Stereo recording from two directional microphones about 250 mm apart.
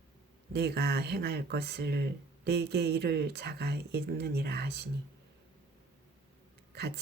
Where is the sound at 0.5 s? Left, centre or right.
Right.